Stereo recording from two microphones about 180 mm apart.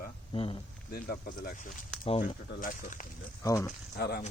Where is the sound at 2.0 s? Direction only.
30° left (ahead or behind).